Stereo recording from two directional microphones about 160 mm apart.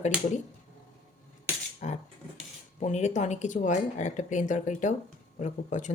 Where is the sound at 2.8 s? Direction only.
45° left (ahead or behind).